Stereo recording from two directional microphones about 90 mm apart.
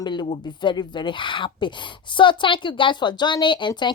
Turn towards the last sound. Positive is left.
turn(degrees=60)  # may be behind; listen again after turning